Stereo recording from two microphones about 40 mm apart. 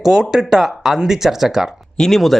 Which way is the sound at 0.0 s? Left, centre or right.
Centre.